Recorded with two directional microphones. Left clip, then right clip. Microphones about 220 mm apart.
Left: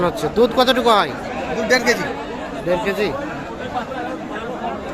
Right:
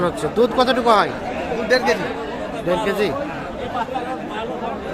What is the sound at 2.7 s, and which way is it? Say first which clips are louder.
Speech: even; centre (ahead or behind).